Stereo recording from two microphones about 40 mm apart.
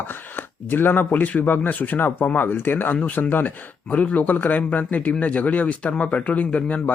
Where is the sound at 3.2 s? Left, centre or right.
Left.